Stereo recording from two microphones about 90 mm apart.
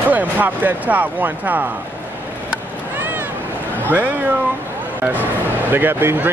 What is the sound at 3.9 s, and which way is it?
Speech, 20° right (ahead or behind).